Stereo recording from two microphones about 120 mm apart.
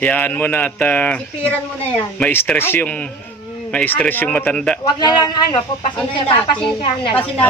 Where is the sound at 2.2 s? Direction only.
15° left (ahead or behind).